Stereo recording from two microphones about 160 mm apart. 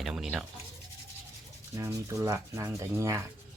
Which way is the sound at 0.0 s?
Centre (ahead or behind).